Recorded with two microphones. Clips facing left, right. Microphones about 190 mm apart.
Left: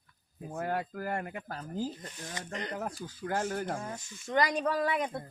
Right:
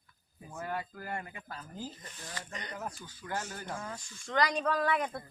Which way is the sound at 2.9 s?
40° left (ahead or behind).